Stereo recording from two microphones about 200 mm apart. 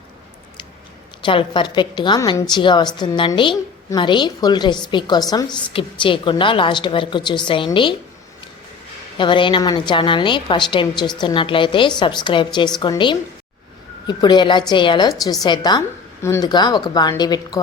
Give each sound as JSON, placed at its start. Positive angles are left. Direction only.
{"t": 1.2, "sound": "a woman's voice", "side_deg": 25}
{"t": 9.1, "sound": "a woman's voice", "side_deg": 25}